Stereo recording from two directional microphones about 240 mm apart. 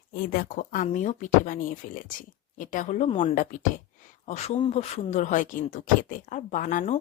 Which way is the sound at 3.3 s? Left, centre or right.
Left.